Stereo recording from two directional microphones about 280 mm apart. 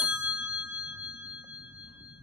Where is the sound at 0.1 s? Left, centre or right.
Centre.